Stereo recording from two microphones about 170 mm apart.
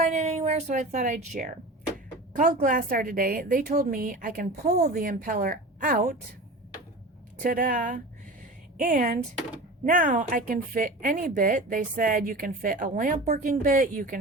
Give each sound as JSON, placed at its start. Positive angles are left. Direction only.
{"t": 0.0, "sound": "a woman's voice", "side_deg": -40}
{"t": 7.3, "sound": "speech", "side_deg": -55}